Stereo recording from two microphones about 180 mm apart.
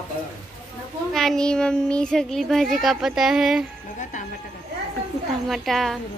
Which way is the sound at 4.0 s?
40° left (ahead or behind).